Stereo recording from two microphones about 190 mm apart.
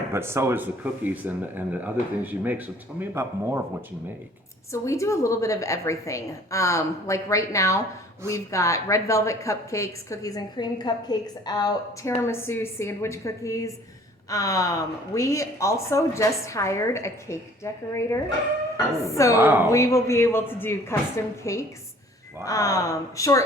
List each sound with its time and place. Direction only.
0.1 s speech: 15° right (ahead or behind)
4.7 s a woman's voice: 15° left (ahead or behind)
19.4 s speech: 10° right (ahead or behind)
19.7 s a woman's voice: 15° left (ahead or behind)